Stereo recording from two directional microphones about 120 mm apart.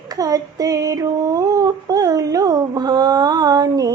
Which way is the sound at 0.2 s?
30° right (ahead or behind).